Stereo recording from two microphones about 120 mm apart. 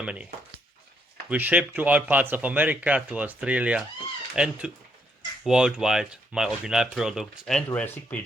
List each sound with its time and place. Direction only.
0.0 s speech: 10° right (ahead or behind)
1.3 s speech: 10° right (ahead or behind)
7.7 s speech: 20° left (ahead or behind)